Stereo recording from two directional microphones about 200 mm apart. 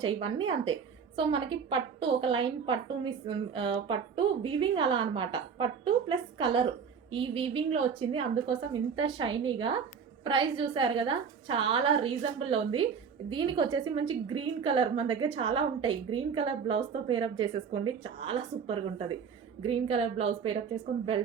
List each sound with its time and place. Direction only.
0.0 s a woman's voice: 25° right (ahead or behind)